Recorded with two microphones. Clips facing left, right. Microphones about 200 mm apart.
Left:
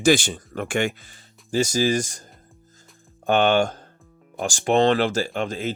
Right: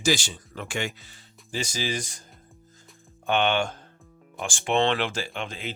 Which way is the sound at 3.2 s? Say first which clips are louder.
Left 5 dB; 45° left (ahead or behind).